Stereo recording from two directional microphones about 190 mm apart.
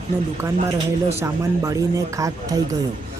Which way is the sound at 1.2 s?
15° right (ahead or behind).